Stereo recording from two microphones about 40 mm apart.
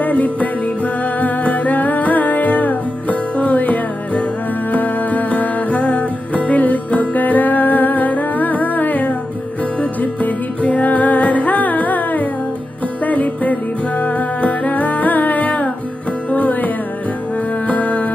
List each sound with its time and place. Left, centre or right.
0.0 s music: left